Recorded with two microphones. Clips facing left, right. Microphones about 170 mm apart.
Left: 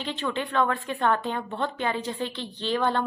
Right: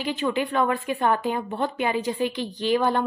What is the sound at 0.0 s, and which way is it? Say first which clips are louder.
A woman's voice: right 5 dB; 10° right (ahead or behind).